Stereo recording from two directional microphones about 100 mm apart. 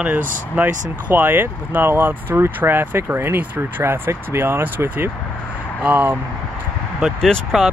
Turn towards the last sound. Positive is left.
turn(degrees=0)  # may be behind; listen again after turning